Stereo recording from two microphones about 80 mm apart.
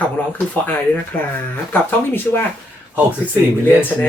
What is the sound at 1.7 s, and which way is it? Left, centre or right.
Speech, left.